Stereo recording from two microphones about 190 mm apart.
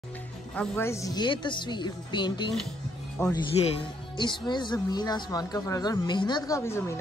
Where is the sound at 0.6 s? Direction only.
15° left (ahead or behind).